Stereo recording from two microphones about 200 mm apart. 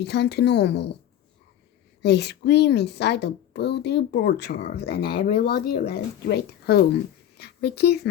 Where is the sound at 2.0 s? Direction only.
55° left (ahead or behind).